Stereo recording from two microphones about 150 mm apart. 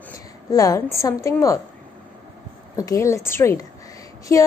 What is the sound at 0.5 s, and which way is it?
Speech, 25° left (ahead or behind).